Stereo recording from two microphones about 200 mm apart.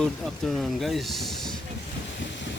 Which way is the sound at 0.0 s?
Centre (ahead or behind).